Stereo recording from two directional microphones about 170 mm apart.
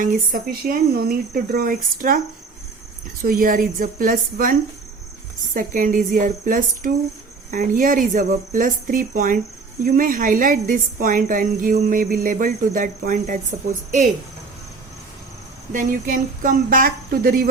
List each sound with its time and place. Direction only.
0.0 s speech: 55° right (ahead or behind)
3.2 s speech: 55° right (ahead or behind)
5.5 s a woman's voice: 55° right (ahead or behind)
15.7 s speech: 55° right (ahead or behind)